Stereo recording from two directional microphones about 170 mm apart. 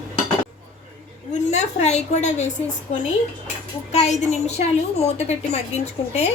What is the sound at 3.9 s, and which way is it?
A woman's voice, 40° left (ahead or behind).